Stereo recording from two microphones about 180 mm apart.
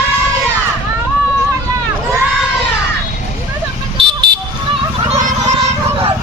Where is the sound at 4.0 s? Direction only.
25° right (ahead or behind).